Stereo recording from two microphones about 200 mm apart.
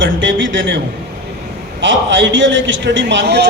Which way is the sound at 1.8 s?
65° right (ahead or behind).